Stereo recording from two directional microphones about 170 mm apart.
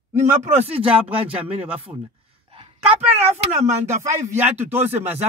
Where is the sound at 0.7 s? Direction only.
35° right (ahead or behind).